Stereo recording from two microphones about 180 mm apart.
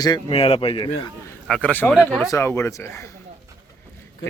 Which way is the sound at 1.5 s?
10° left (ahead or behind).